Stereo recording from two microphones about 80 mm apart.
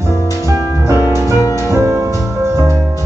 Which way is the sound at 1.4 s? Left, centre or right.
Left.